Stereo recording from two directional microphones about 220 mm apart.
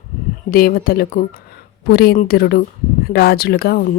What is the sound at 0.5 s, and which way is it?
Speech, 40° left (ahead or behind).